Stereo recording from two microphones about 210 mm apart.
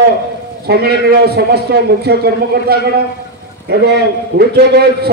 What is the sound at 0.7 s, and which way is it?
A man's voice, 50° right (ahead or behind).